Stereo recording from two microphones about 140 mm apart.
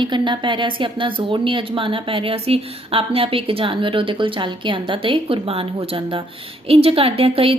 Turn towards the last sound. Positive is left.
turn(degrees=-40)  # may be behind; listen again after turning